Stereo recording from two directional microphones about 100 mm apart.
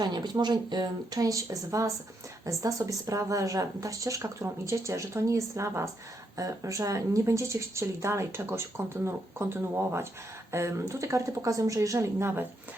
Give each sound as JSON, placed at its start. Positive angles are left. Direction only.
{"t": 0.0, "sound": "a woman's voice", "side_deg": -45}